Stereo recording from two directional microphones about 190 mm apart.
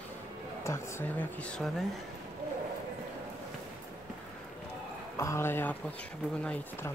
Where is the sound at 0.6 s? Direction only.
15° left (ahead or behind).